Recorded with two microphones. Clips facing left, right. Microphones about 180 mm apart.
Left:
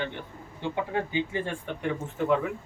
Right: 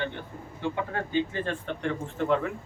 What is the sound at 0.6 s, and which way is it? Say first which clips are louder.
Speech: left 1 dB; 15° left (ahead or behind).